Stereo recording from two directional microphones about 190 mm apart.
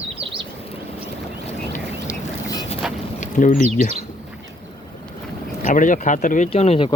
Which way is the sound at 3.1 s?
40° left (ahead or behind).